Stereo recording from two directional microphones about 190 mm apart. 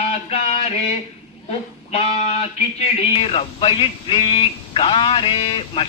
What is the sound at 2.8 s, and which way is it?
A man's voice, 30° left (ahead or behind).